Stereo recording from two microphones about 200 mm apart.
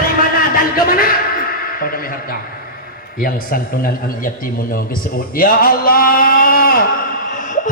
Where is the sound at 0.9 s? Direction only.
45° left (ahead or behind).